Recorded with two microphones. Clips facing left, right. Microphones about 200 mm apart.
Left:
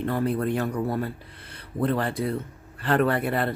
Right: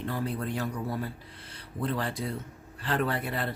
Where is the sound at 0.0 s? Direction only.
60° left (ahead or behind).